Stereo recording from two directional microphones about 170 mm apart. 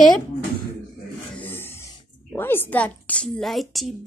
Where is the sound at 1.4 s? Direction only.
15° left (ahead or behind).